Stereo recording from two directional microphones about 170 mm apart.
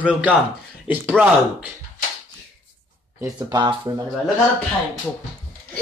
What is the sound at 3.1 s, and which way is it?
Speech, 20° right (ahead or behind).